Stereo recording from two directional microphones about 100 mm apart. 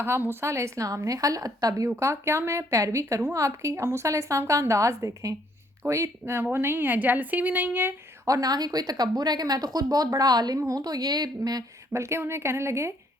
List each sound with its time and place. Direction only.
0.0 s a woman's voice: 20° right (ahead or behind)
8.3 s a woman's voice: 40° right (ahead or behind)
11.9 s a woman's voice: 25° right (ahead or behind)